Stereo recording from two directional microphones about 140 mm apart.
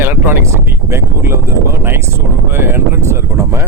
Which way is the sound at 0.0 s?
15° right (ahead or behind).